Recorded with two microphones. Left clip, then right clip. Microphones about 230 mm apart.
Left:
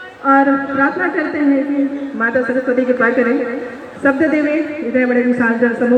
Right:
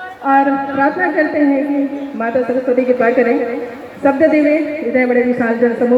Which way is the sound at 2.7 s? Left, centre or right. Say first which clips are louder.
Right 2 dB; left.